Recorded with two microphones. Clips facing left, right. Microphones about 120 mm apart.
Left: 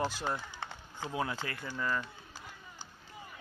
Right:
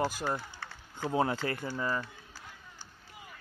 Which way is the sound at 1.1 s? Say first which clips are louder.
Right 6 dB; 35° right (ahead or behind).